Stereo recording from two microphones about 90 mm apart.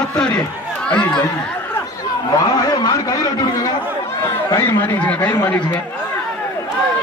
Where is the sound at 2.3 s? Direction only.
50° left (ahead or behind).